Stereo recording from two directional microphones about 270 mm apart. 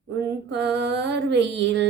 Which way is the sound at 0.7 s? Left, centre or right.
Right.